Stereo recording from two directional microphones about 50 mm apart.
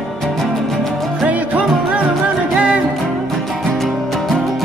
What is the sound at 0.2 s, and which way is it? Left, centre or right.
Music, centre.